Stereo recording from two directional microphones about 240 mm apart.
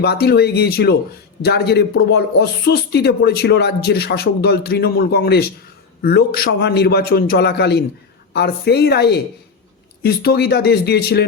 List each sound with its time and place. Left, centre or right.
0.0 s a woman's voice: left